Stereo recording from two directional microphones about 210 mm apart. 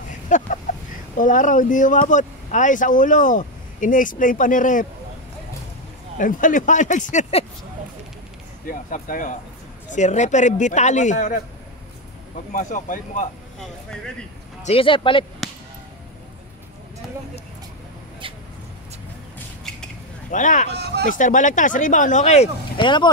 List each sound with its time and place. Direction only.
0.3 s speech: 35° left (ahead or behind)
0.7 s chicken: 35° left (ahead or behind)
1.1 s speech: 40° left (ahead or behind)
6.1 s speech: 40° left (ahead or behind)
8.6 s speech: 40° left (ahead or behind)
12.5 s speech: 40° left (ahead or behind)
13.6 s speech: 5° left (ahead or behind)
14.7 s speech: 25° left (ahead or behind)
19.3 s a sound: 5° left (ahead or behind)
20.2 s speech: 35° left (ahead or behind)